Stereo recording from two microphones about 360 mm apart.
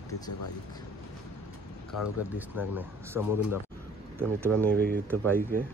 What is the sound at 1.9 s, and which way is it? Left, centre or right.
Speech, left.